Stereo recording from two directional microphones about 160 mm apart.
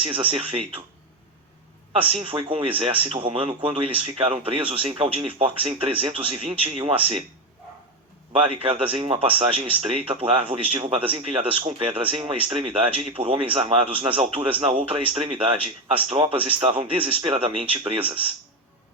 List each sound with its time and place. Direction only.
0.1 s speech: 35° right (ahead or behind)
2.0 s speech: 35° right (ahead or behind)
8.3 s speech: 35° right (ahead or behind)